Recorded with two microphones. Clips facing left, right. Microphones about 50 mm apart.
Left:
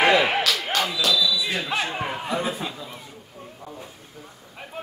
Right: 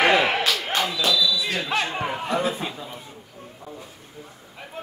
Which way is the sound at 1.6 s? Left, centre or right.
Centre.